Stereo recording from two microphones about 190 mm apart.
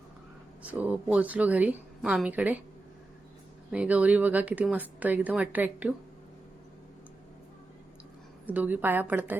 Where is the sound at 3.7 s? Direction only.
5° right (ahead or behind).